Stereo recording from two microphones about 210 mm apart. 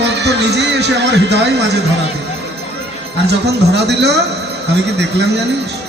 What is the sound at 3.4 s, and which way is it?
Speech, 55° right (ahead or behind).